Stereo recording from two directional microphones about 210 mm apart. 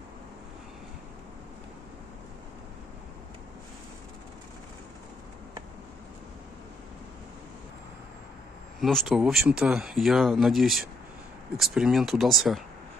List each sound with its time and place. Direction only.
8.8 s speech: centre (ahead or behind)